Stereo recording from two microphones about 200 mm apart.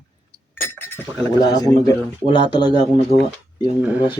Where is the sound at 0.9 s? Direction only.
20° left (ahead or behind).